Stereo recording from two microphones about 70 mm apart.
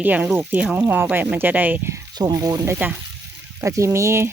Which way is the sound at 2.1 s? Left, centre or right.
Right.